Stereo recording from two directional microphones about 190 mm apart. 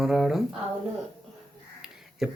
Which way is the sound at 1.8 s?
Centre (ahead or behind).